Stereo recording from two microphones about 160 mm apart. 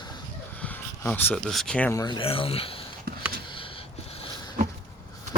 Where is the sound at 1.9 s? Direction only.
25° left (ahead or behind).